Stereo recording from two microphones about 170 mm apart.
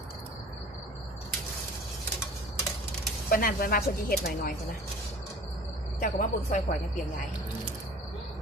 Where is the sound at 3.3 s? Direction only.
60° left (ahead or behind).